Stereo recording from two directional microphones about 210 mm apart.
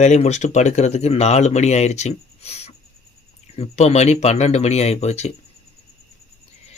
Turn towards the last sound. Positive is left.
turn(degrees=30)  # may be behind; listen again after turning